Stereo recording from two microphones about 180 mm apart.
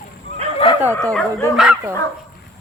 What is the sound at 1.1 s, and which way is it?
Speech, 15° left (ahead or behind).